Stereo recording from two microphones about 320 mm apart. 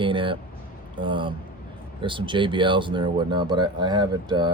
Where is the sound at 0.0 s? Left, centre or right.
Centre.